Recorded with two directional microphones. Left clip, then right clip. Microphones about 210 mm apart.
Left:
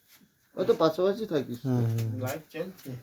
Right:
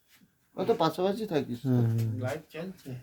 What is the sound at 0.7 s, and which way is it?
Speech, 20° right (ahead or behind).